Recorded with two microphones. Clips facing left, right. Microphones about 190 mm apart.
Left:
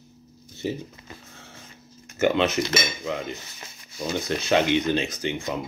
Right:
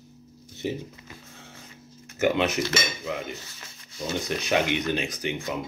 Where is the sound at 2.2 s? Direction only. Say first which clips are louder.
Left 2 dB; 10° right (ahead or behind).